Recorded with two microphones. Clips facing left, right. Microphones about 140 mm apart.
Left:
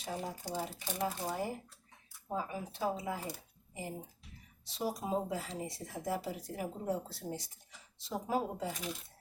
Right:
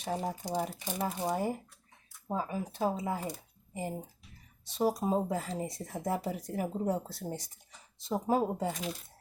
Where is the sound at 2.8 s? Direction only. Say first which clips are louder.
Right 4 dB; 45° right (ahead or behind).